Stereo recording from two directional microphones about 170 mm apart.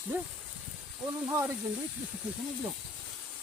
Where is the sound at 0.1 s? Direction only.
10° right (ahead or behind).